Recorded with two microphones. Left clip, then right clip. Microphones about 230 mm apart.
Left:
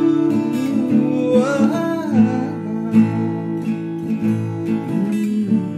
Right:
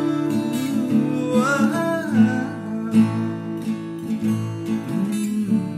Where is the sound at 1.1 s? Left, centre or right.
Centre.